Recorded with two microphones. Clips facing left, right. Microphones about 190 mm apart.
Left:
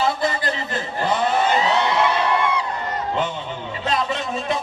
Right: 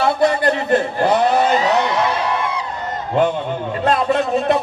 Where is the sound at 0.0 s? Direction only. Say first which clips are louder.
Right 6 dB; 60° right (ahead or behind).